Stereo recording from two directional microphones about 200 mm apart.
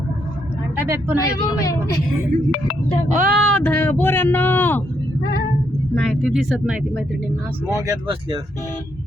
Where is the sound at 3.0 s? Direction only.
40° right (ahead or behind).